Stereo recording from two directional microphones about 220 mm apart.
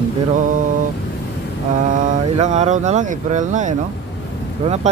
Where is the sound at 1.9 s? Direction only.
30° right (ahead or behind).